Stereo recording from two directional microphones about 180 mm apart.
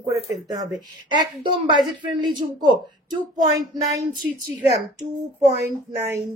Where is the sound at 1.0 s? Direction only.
25° right (ahead or behind).